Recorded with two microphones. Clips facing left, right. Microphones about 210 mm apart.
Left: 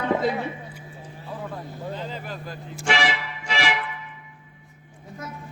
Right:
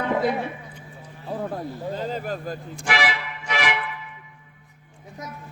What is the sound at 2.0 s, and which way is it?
Speech, 45° right (ahead or behind).